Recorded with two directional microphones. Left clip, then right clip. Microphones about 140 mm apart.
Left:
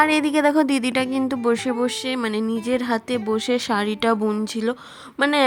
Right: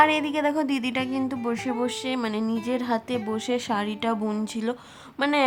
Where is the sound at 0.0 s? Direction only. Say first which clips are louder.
Left 3 dB; 40° left (ahead or behind).